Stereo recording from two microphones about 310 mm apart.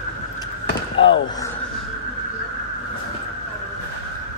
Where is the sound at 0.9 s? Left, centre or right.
Left.